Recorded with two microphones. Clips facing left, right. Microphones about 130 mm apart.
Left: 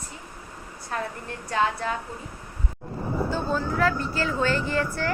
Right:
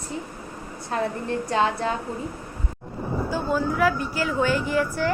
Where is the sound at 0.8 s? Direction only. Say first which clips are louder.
Right 6 dB; 25° right (ahead or behind).